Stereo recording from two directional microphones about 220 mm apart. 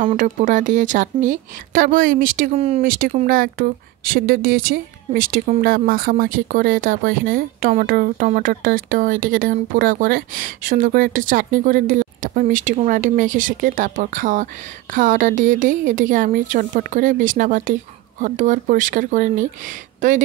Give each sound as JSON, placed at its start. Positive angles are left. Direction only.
{"t": 0.0, "sound": "speech", "side_deg": -35}
{"t": 2.8, "sound": "speech", "side_deg": -40}